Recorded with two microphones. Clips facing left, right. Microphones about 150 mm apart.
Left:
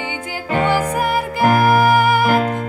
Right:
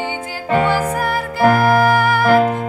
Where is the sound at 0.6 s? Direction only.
15° left (ahead or behind).